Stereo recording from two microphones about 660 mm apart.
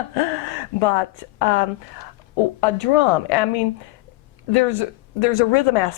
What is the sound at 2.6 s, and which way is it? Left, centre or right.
Speech, left.